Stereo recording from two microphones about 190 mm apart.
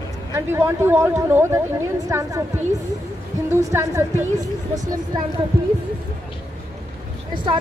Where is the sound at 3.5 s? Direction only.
15° right (ahead or behind).